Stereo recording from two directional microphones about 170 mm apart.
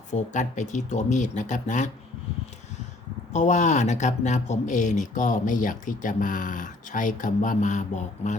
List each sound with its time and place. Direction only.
0.1 s speech: 45° left (ahead or behind)
3.3 s speech: 45° left (ahead or behind)